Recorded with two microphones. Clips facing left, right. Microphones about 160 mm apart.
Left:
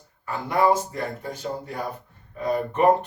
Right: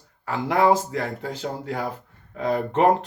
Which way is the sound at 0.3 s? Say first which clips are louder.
Right 2 dB; 90° right.